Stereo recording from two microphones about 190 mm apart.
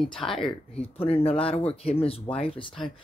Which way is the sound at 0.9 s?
30° left (ahead or behind).